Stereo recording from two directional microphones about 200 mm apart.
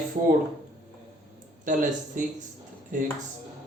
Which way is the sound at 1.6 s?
40° right (ahead or behind).